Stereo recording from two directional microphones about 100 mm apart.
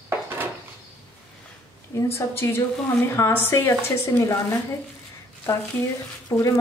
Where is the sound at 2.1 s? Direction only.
25° left (ahead or behind).